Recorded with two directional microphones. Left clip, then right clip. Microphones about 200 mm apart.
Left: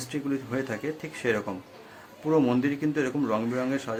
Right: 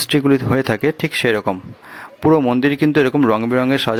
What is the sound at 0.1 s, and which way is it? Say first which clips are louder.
Speech: right 15 dB; 45° right (ahead or behind).